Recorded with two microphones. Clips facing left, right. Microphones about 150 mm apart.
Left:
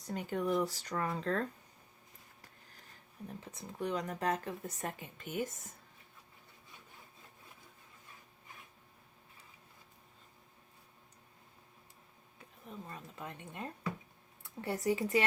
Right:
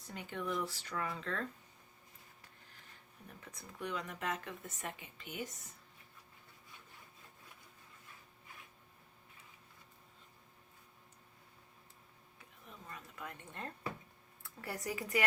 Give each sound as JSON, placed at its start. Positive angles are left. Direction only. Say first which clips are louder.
{"t": 0.0, "sound": "speech", "louder": "left 7 dB", "side_deg": 40}
{"t": 3.2, "sound": "speech", "louder": "left 7 dB", "side_deg": 25}
{"t": 12.6, "sound": "speech", "louder": "left 5 dB", "side_deg": 30}